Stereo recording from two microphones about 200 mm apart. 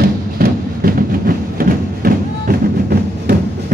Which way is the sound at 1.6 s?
45° right (ahead or behind).